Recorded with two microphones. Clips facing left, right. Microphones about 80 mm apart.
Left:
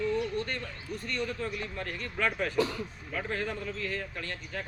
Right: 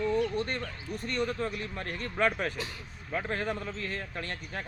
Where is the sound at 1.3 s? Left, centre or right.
Right.